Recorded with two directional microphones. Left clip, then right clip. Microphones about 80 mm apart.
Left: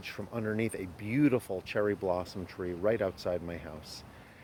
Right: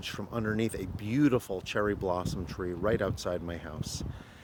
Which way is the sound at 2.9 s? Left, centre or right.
Right.